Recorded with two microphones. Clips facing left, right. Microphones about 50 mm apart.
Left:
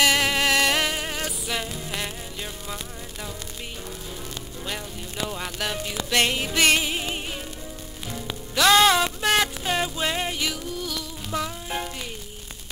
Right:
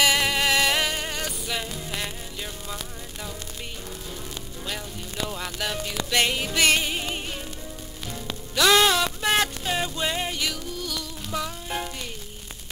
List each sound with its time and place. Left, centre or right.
0.0 s music: centre
4.6 s music: centre
9.2 s music: centre
9.7 s music: centre